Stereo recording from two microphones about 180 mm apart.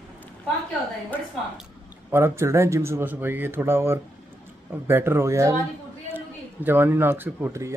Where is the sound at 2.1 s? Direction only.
15° right (ahead or behind).